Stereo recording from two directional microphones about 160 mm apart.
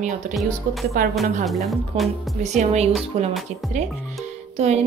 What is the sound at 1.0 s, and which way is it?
Speech, 60° right (ahead or behind).